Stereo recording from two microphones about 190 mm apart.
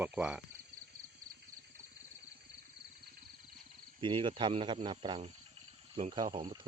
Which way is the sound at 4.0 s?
25° right (ahead or behind).